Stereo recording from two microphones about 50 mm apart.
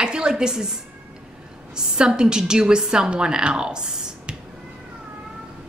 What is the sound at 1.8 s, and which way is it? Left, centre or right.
Speech, centre.